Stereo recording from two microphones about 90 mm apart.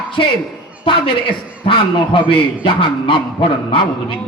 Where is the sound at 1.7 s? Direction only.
70° left (ahead or behind).